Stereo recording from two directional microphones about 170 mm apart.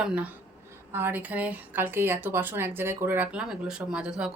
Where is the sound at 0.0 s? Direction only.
10° right (ahead or behind).